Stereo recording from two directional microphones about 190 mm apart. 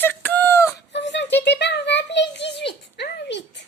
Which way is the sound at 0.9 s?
65° left (ahead or behind).